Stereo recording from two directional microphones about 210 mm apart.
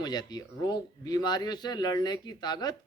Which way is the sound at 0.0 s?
20° left (ahead or behind).